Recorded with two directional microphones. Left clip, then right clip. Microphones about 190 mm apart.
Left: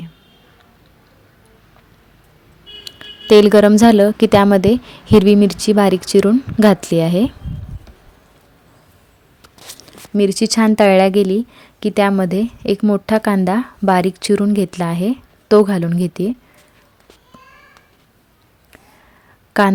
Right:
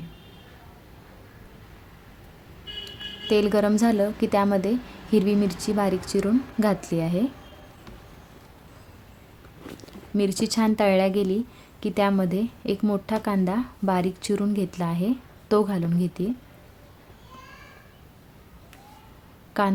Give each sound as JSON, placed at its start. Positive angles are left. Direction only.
{"t": 2.8, "sound": "a woman's voice", "side_deg": 45}
{"t": 9.8, "sound": "speech", "side_deg": 35}
{"t": 19.6, "sound": "a woman's voice", "side_deg": 45}